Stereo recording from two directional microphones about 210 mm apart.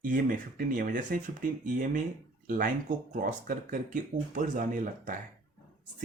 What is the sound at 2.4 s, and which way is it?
Speech, 40° right (ahead or behind).